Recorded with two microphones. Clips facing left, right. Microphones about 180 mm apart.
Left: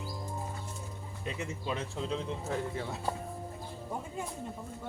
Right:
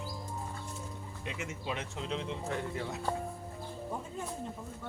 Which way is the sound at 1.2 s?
35° left (ahead or behind).